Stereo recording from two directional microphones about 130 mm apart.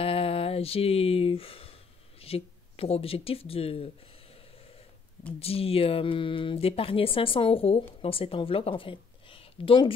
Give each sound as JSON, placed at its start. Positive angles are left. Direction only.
{"t": 0.0, "sound": "a sound", "side_deg": 45}
{"t": 2.2, "sound": "speech", "side_deg": 50}
{"t": 5.4, "sound": "speech", "side_deg": 50}